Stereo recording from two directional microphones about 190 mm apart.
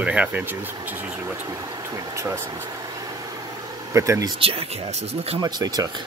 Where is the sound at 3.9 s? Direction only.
15° right (ahead or behind); by 5.4 s 35° right (ahead or behind).